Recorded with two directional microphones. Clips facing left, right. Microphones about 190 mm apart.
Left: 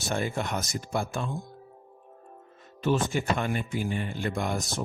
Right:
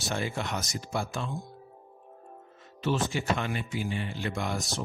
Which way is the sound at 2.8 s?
50° left (ahead or behind).